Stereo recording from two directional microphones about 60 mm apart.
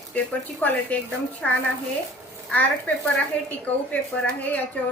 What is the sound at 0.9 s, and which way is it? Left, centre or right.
Speech, left.